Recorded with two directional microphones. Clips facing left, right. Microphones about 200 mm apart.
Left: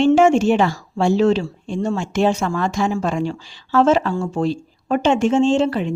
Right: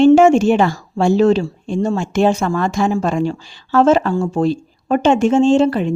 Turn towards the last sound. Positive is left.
turn(degrees=-45)  # may be behind; listen again after turning